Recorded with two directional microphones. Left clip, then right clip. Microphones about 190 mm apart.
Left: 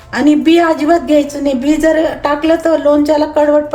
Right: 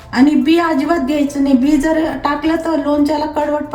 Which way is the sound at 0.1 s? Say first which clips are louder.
Left 2 dB; 50° left (ahead or behind).